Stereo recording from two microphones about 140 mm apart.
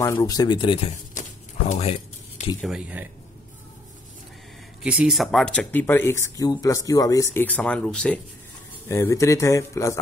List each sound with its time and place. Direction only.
0.0 s speech: 20° left (ahead or behind); by 0.9 s 35° left (ahead or behind)
1.7 s a sound: 55° left (ahead or behind)
2.6 s speech: 5° right (ahead or behind)
4.8 s speech: 5° right (ahead or behind); by 7.4 s 25° left (ahead or behind)
7.4 s speech: 10° left (ahead or behind)
8.8 s speech: 20° left (ahead or behind)